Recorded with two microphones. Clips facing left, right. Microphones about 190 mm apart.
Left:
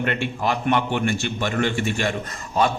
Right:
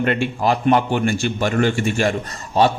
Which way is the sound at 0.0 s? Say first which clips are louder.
Right 5 dB; 35° right (ahead or behind).